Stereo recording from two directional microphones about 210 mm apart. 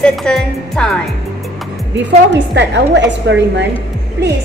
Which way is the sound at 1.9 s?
55° right (ahead or behind).